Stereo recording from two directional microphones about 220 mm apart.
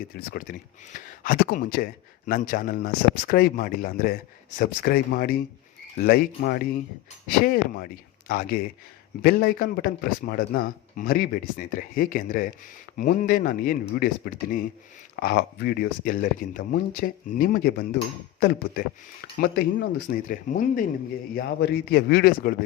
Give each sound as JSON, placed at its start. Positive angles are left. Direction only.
{"t": 0.0, "sound": "speech", "side_deg": 40}